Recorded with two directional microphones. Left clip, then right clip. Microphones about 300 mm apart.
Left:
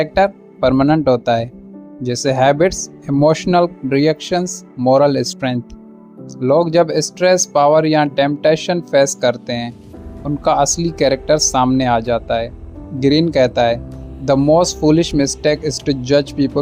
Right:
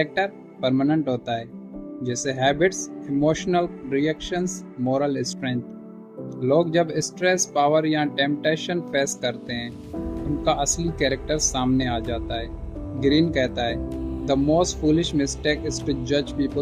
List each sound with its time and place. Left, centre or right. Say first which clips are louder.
0.0 s speech: left 9 dB; left